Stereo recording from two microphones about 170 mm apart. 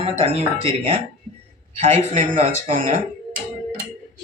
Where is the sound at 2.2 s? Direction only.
45° right (ahead or behind).